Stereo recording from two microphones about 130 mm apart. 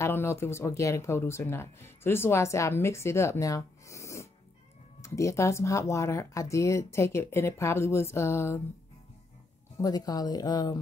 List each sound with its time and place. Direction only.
0.0 s speech: 20° left (ahead or behind)
9.8 s speech: 30° left (ahead or behind)